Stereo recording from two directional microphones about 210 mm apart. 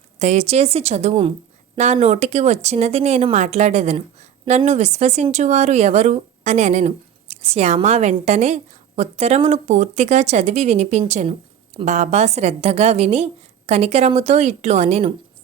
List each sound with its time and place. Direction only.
0.2 s speech: 30° right (ahead or behind)